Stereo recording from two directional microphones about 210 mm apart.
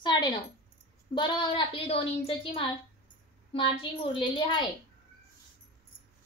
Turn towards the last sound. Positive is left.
turn(degrees=20)  # may be behind; listen again after turning